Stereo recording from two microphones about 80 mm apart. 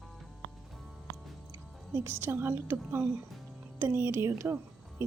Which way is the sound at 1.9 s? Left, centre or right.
Right.